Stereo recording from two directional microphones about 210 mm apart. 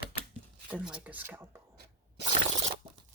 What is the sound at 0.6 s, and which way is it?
Speech, 5° right (ahead or behind).